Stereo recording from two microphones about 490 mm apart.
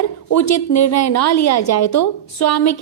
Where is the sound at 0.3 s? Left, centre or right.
Left.